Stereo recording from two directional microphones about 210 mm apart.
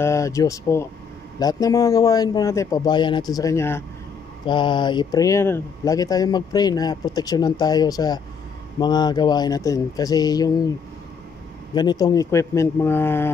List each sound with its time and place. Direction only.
0.0 s a man's voice: 15° left (ahead or behind)
4.5 s a man's voice: 20° left (ahead or behind)
11.7 s a man's voice: 20° left (ahead or behind)